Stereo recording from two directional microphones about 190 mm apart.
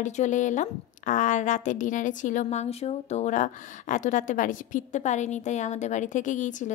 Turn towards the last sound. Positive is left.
turn(degrees=40)  # may be behind; listen again after turning